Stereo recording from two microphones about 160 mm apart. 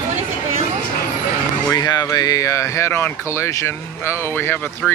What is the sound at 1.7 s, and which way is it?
Speech, 25° left (ahead or behind).